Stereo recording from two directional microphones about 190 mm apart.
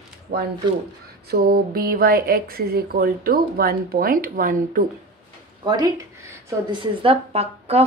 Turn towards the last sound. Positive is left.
turn(degrees=-30)  # may be behind; listen again after turning